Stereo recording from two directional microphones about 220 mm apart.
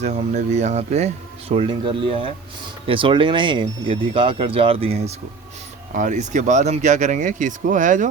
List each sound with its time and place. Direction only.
0.0 s speech: 30° right (ahead or behind)